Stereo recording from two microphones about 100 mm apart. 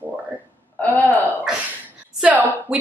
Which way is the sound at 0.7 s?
15° left (ahead or behind).